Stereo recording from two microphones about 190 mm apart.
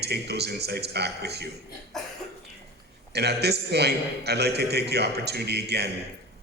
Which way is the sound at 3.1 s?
60° right (ahead or behind).